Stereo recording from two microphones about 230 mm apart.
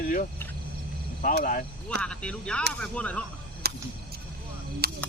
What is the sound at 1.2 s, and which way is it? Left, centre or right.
Speech, left.